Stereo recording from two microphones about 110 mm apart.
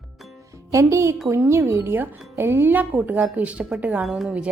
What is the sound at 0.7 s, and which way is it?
Speech, 25° right (ahead or behind).